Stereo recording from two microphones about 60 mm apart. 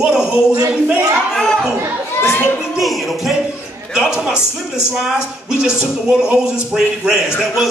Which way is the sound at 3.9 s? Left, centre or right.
Centre.